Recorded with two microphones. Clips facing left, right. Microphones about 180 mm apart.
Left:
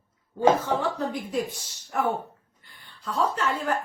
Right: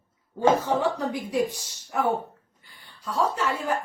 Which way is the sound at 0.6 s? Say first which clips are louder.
Right 2 dB; 15° right (ahead or behind).